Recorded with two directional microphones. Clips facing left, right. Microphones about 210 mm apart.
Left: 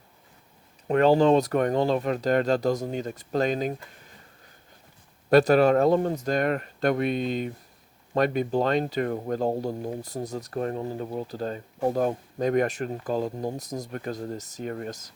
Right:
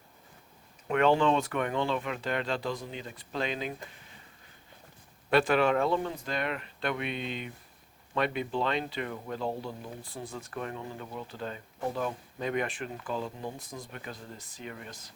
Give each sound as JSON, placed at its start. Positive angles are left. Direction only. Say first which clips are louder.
{"t": 0.9, "sound": "speech", "louder": "left 6 dB", "side_deg": 35}
{"t": 5.3, "sound": "speech", "louder": "left 7 dB", "side_deg": 40}